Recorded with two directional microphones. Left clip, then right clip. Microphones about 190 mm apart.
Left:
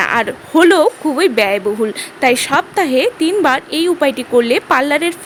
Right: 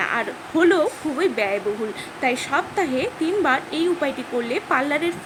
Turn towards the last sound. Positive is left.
turn(degrees=55)  # may be behind; listen again after turning